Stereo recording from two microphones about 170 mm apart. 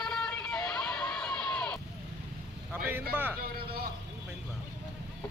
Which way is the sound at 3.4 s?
65° right (ahead or behind).